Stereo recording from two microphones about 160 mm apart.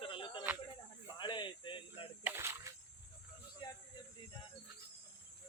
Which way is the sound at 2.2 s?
15° right (ahead or behind).